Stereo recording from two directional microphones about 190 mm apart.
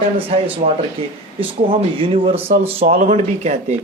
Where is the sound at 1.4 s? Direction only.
30° right (ahead or behind).